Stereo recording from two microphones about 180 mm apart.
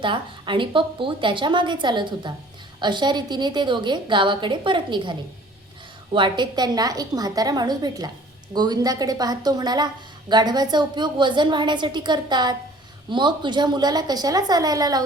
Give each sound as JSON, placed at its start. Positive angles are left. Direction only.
{"t": 0.0, "sound": "a woman's voice", "side_deg": -25}
{"t": 6.1, "sound": "a woman's voice", "side_deg": -25}